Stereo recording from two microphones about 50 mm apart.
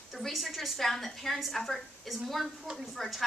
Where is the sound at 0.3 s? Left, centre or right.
Centre.